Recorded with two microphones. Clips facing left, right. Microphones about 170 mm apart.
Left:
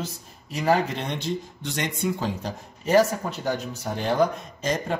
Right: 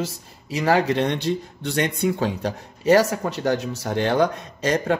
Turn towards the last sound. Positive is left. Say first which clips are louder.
# right 5 dB
turn(degrees=-70)  # may be behind; listen again after turning